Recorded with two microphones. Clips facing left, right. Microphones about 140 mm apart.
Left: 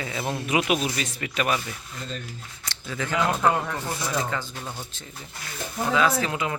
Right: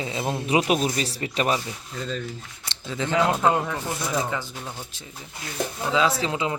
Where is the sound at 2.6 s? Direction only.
20° right (ahead or behind).